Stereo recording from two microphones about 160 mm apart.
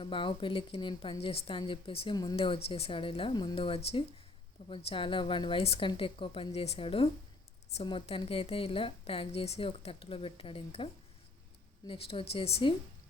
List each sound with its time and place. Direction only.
0.0 s a woman's voice: 30° left (ahead or behind)
11.9 s a woman's voice: 35° left (ahead or behind)